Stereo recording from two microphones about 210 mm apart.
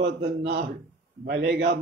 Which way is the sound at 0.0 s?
50° right (ahead or behind).